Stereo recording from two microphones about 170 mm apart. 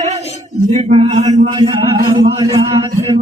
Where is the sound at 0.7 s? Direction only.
40° right (ahead or behind).